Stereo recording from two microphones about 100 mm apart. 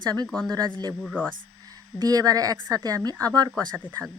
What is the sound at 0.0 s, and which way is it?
Speech, 40° right (ahead or behind).